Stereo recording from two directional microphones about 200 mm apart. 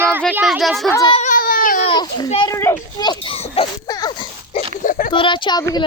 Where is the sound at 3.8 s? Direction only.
20° left (ahead or behind).